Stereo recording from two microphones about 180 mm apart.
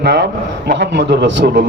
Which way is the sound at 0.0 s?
65° right (ahead or behind).